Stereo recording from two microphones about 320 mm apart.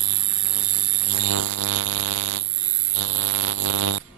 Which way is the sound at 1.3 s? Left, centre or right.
Right.